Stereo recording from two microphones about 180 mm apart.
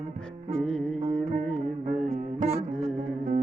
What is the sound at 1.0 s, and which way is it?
Carnatic music, 40° right (ahead or behind).